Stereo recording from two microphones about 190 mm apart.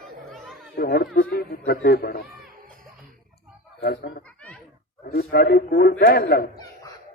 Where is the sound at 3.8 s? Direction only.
55° left (ahead or behind).